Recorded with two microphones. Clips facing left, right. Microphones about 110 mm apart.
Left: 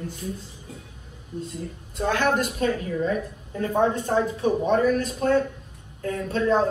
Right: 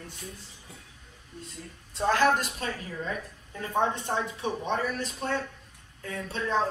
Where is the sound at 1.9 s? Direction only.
35° right (ahead or behind).